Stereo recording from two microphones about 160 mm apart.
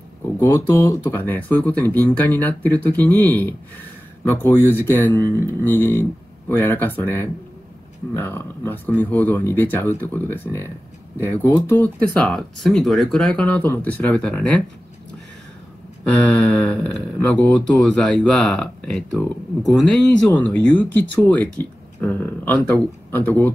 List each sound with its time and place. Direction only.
0.4 s speech: 15° left (ahead or behind)
16.1 s speech: 10° left (ahead or behind)